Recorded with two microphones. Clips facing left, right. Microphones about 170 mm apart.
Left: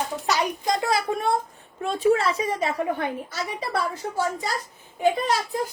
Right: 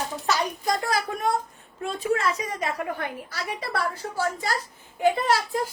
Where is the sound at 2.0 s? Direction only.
30° left (ahead or behind).